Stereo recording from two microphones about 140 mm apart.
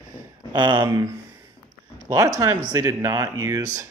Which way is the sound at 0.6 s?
35° right (ahead or behind).